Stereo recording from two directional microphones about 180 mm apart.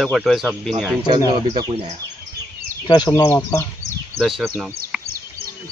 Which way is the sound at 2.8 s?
25° left (ahead or behind).